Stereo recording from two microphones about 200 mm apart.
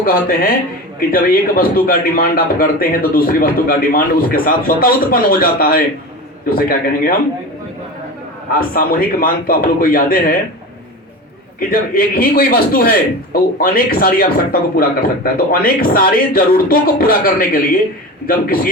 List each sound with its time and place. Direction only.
0.0 s a man's voice: 50° left (ahead or behind)
8.5 s a man's voice: 45° left (ahead or behind)
11.7 s a man's voice: 45° left (ahead or behind)